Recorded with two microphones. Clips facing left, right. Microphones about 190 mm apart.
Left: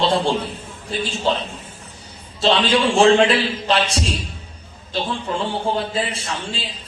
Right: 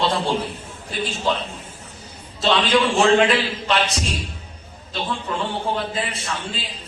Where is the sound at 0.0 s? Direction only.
30° left (ahead or behind).